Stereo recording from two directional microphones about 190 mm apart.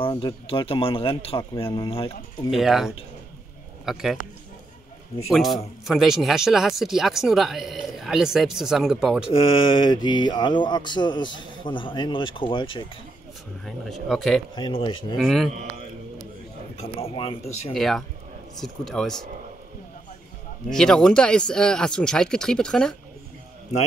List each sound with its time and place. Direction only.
0.0 s speech: 25° left (ahead or behind)
2.5 s speech: centre (ahead or behind)
5.3 s speech: centre (ahead or behind)
9.3 s speech: 25° left (ahead or behind)
13.7 s speech: centre (ahead or behind)
14.5 s speech: 25° left (ahead or behind)
15.1 s speech: centre (ahead or behind)
16.8 s speech: 30° left (ahead or behind)
17.7 s speech: centre (ahead or behind)
20.7 s speech: 5° left (ahead or behind)